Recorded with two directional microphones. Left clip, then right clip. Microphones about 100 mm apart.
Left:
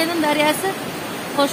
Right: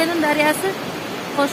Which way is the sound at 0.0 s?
20° left (ahead or behind).